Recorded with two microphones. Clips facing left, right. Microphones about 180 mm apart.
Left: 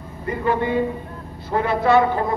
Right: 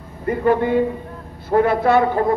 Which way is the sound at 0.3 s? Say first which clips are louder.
Right 4 dB; 50° right (ahead or behind).